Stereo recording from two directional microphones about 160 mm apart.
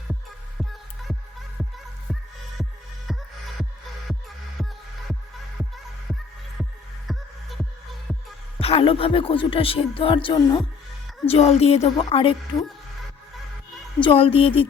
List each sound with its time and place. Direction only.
1.6 s music: centre (ahead or behind)
7.1 s music: centre (ahead or behind)
8.6 s speech: 35° left (ahead or behind)
14.0 s speech: 35° left (ahead or behind)